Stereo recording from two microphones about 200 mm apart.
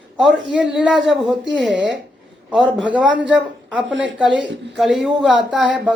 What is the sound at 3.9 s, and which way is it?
Speech, 65° right (ahead or behind).